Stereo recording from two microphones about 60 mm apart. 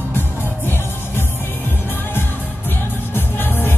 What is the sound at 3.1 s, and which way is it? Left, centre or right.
Music, left.